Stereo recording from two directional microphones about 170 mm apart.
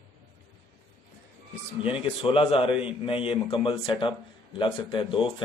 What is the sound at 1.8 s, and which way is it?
Speech, 30° left (ahead or behind).